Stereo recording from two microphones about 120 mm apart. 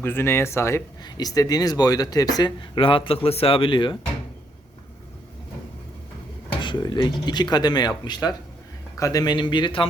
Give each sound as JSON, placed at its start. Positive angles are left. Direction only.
{"t": 0.0, "sound": "speech", "side_deg": 20}
{"t": 1.0, "sound": "speech", "side_deg": 35}
{"t": 6.6, "sound": "speech", "side_deg": 40}